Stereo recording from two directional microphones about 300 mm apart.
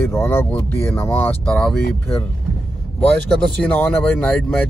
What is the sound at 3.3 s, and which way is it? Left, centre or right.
Speech, centre.